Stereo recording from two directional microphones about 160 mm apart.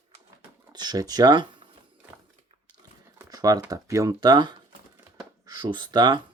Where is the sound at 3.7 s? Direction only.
20° right (ahead or behind).